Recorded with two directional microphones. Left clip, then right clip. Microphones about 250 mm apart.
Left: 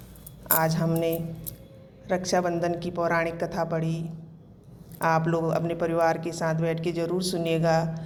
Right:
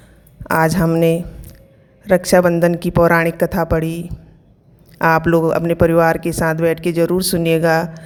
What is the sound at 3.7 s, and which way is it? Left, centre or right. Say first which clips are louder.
Speech: right 10 dB; right.